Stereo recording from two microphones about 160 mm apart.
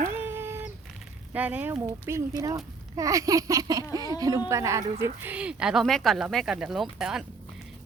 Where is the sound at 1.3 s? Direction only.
10° right (ahead or behind).